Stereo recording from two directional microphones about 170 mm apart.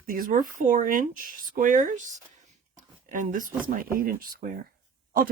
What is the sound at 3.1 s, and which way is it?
Speech, 50° right (ahead or behind).